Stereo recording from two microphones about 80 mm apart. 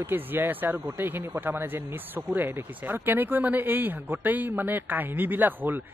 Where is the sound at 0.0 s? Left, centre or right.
Right.